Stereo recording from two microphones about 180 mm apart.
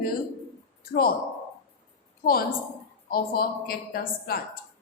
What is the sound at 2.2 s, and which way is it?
A woman's voice, 55° left (ahead or behind).